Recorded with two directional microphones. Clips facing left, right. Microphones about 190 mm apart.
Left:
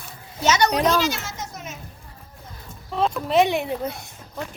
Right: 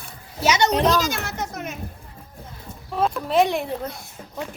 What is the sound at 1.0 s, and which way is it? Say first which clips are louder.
Speech: even; 55° right (ahead or behind).